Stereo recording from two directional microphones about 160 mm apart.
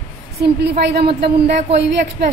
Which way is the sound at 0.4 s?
90° right.